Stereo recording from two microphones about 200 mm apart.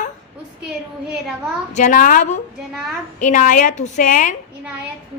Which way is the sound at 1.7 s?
40° left (ahead or behind).